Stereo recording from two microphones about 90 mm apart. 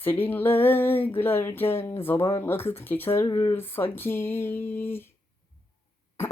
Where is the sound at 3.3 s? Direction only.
40° left (ahead or behind).